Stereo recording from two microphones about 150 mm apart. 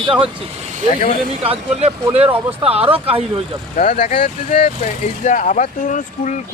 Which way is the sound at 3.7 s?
60° left (ahead or behind).